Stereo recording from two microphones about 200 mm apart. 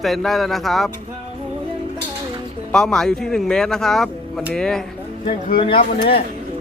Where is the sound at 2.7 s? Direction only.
5° left (ahead or behind).